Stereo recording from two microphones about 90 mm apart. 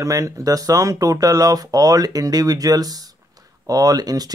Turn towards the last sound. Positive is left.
turn(degrees=-45)  # may be behind; listen again after turning